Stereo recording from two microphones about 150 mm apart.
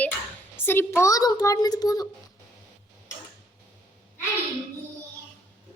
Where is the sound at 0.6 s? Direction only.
15° left (ahead or behind).